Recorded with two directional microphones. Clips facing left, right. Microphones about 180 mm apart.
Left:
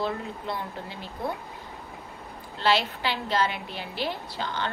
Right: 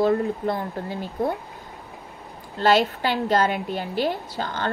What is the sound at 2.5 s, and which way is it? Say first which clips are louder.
A woman's voice: right 6 dB; 45° right (ahead or behind).